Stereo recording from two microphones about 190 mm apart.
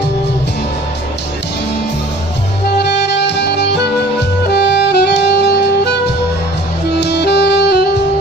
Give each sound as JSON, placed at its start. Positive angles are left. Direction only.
{"t": 2.8, "sound": "music", "side_deg": 65}
{"t": 7.0, "sound": "saxophone", "side_deg": 60}